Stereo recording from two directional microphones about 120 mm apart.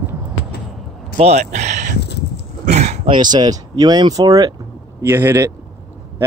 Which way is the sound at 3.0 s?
40° right (ahead or behind).